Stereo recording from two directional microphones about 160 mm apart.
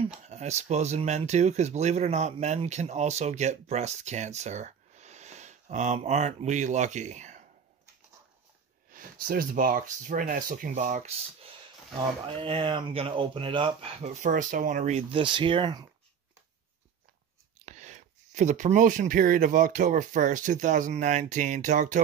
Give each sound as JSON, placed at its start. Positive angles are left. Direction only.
{"t": 0.2, "sound": "speech", "side_deg": -45}
{"t": 8.9, "sound": "speech", "side_deg": -60}
{"t": 14.2, "sound": "speech", "side_deg": -55}
{"t": 17.6, "sound": "speech", "side_deg": -50}